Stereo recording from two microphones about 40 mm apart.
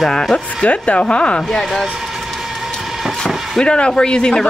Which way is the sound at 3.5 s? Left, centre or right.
Left.